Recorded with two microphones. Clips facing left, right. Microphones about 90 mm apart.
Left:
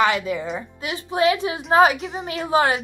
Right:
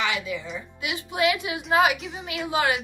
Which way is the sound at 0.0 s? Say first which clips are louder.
Left 8 dB; 45° left (ahead or behind).